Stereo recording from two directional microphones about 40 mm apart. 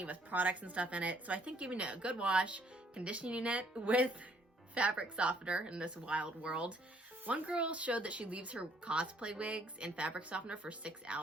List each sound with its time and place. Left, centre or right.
0.0 s speech: right